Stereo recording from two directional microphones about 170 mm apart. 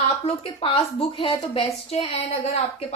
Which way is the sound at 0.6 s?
30° left (ahead or behind).